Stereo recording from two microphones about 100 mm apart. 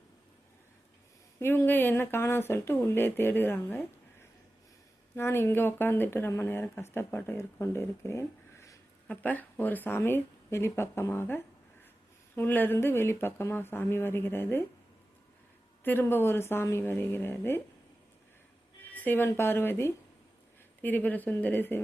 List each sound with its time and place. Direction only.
1.4 s speech: 25° left (ahead or behind)
5.1 s speech: 25° left (ahead or behind)
9.0 s speech: 15° left (ahead or behind)
15.8 s speech: 20° left (ahead or behind)
18.9 s a woman's voice: 15° left (ahead or behind)